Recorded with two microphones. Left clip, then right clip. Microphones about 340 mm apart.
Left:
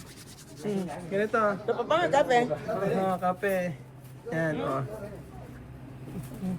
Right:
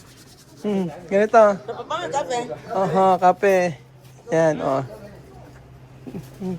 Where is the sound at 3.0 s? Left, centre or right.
Centre.